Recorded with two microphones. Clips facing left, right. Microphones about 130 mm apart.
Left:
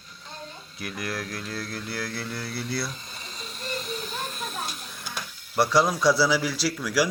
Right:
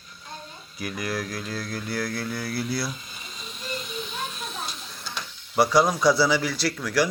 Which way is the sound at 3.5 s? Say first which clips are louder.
Left 1 dB; centre (ahead or behind).